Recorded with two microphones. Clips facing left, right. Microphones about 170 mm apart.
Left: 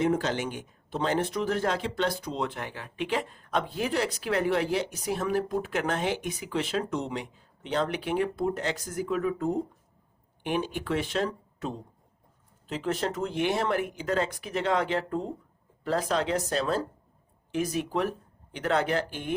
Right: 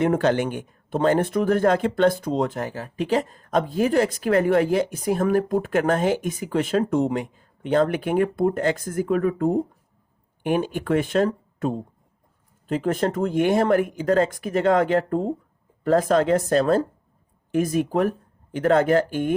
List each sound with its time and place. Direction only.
0.0 s speech: 60° right (ahead or behind)